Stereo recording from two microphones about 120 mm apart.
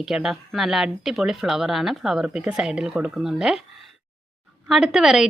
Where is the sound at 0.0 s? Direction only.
5° right (ahead or behind).